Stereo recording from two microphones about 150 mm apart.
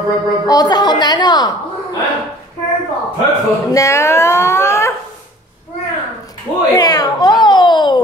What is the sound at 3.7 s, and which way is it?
Speech, 20° left (ahead or behind).